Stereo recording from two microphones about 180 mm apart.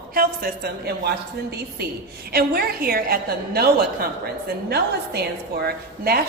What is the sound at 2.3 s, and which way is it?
A woman's voice, 60° right (ahead or behind).